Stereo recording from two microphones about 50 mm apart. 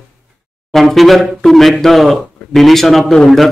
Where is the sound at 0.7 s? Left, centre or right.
Centre.